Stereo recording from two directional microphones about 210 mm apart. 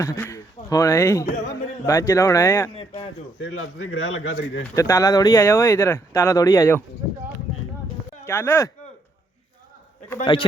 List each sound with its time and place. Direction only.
0.0 s speech: 15° left (ahead or behind)
3.4 s a man's voice: 70° left (ahead or behind)
4.7 s speech: 15° left (ahead or behind)
8.3 s speech: 10° left (ahead or behind)
10.3 s speech: 20° left (ahead or behind)